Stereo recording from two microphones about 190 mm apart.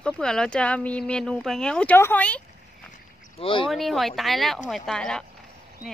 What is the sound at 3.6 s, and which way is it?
Speech, centre (ahead or behind).